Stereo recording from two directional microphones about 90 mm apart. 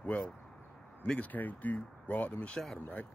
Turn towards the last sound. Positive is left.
turn(degrees=20)  # may be behind; listen again after turning